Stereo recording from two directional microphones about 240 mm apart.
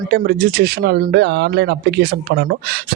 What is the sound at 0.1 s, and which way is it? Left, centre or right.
Speech, right.